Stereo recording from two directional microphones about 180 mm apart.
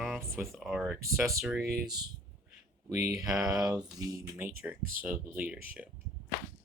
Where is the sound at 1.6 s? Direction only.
60° right (ahead or behind).